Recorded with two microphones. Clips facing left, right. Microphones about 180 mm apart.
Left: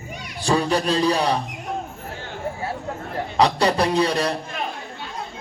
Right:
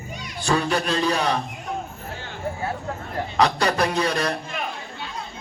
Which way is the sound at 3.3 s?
30° left (ahead or behind).